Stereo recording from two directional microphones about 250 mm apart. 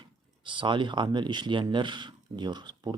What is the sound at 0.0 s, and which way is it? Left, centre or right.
Speech, centre.